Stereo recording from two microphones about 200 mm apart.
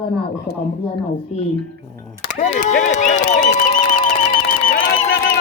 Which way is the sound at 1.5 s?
50° right (ahead or behind).